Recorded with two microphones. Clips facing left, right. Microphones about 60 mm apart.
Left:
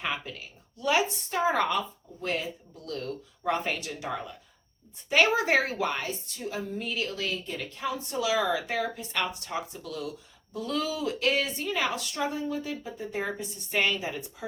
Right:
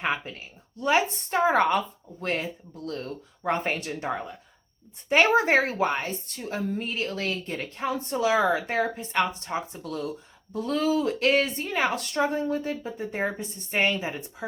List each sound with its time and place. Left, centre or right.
0.0 s speech: right
1.5 s a woman's voice: right
6.2 s a woman's voice: right
6.7 s speech: right